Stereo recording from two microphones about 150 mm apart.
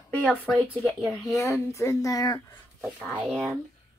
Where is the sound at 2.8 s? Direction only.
Centre (ahead or behind).